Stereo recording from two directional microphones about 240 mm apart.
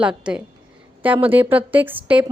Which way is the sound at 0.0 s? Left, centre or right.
Centre.